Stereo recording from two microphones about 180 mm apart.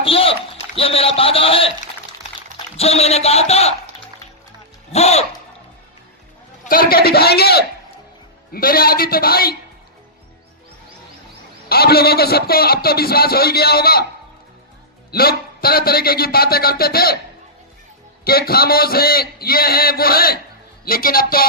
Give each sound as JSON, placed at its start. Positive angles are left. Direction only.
{"t": 0.0, "sound": "a sound", "side_deg": 30}
{"t": 0.8, "sound": "a man's voice", "side_deg": 30}
{"t": 2.7, "sound": "a man's voice", "side_deg": 35}
{"t": 4.9, "sound": "a man's voice", "side_deg": 35}
{"t": 6.7, "sound": "a man's voice", "side_deg": 55}
{"t": 11.7, "sound": "a man's voice", "side_deg": 60}
{"t": 15.1, "sound": "a man's voice", "side_deg": 55}
{"t": 18.3, "sound": "a man's voice", "side_deg": 55}